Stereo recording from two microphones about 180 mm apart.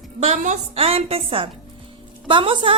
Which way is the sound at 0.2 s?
40° right (ahead or behind).